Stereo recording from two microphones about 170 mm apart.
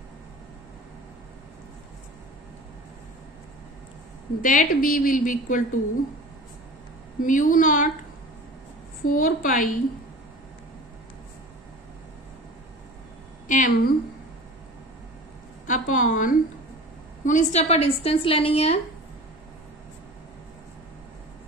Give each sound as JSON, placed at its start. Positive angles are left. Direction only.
{"t": 4.4, "sound": "a woman's voice", "side_deg": 50}
{"t": 7.2, "sound": "a woman's voice", "side_deg": 50}
{"t": 9.0, "sound": "a woman's voice", "side_deg": 55}
{"t": 13.5, "sound": "a woman's voice", "side_deg": 50}
{"t": 15.6, "sound": "a woman's voice", "side_deg": 50}